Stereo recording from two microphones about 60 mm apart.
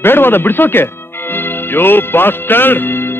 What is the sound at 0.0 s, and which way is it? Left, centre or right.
Speech, left.